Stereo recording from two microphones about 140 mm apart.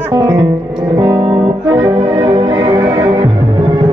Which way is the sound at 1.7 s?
15° right (ahead or behind).